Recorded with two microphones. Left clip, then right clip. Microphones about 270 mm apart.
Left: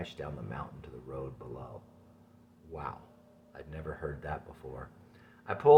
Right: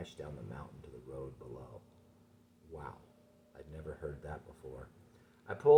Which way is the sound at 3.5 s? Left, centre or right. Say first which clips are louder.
Left 5 dB; left.